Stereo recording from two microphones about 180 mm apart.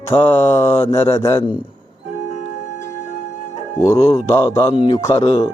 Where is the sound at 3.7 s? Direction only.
15° left (ahead or behind).